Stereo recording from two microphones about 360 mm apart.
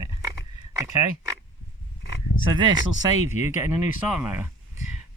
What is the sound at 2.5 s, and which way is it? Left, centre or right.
Speech, centre.